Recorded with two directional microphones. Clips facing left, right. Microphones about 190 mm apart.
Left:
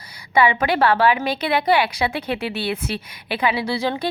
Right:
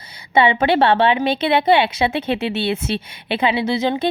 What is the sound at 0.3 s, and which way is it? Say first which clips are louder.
Speech: right 3 dB; 25° right (ahead or behind).